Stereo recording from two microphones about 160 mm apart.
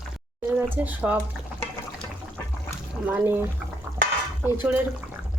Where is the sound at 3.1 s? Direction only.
10° right (ahead or behind).